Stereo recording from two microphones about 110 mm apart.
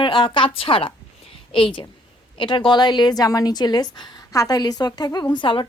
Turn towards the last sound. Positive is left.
turn(degrees=50)  # may be behind; listen again after turning